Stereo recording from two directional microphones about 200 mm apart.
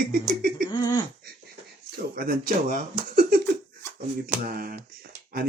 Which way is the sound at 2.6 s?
45° right (ahead or behind).